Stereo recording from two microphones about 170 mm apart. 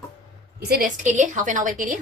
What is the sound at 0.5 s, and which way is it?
Speech, 60° right (ahead or behind).